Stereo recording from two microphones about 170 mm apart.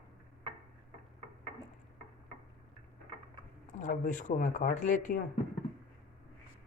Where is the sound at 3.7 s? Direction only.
50° left (ahead or behind).